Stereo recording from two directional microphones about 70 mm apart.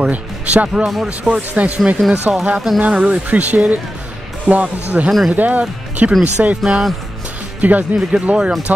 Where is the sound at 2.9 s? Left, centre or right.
Centre.